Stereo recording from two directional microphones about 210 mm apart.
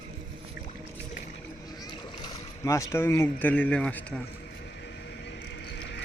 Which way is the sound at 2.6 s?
15° left (ahead or behind).